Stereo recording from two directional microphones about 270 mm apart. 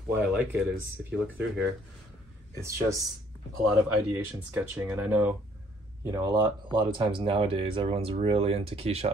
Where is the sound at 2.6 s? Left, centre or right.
Centre.